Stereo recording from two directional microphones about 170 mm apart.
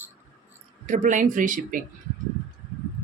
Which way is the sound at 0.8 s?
45° right (ahead or behind).